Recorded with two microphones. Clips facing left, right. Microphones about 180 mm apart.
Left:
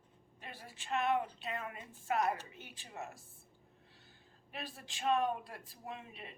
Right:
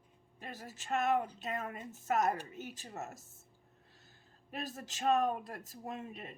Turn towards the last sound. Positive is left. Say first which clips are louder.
# right 4 dB
turn(degrees=-45)  # may be behind; listen again after turning